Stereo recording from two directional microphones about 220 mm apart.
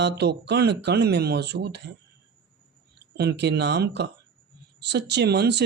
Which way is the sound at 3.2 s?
50° right (ahead or behind).